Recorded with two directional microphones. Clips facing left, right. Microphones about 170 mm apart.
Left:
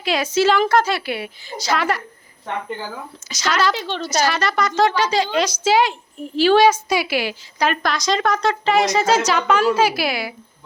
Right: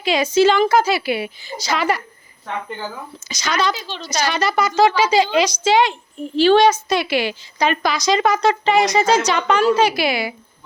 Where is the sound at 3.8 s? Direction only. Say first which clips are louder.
Left 4 dB; 55° left (ahead or behind).